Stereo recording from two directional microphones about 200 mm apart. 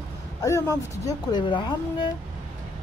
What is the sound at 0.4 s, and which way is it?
A woman's voice, 15° left (ahead or behind).